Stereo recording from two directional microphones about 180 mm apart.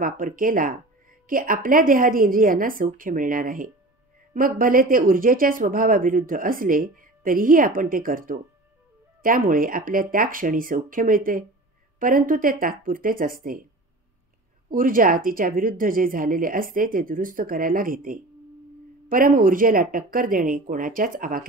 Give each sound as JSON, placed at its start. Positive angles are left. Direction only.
{"t": 0.0, "sound": "speech", "side_deg": -50}
{"t": 14.7, "sound": "speech", "side_deg": -50}